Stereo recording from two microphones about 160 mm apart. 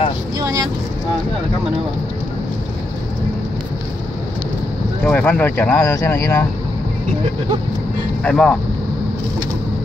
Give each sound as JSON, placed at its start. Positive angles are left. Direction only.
{"t": 0.4, "sound": "vehicle", "side_deg": -20}
{"t": 5.0, "sound": "speech", "side_deg": 10}
{"t": 8.2, "sound": "speech", "side_deg": 5}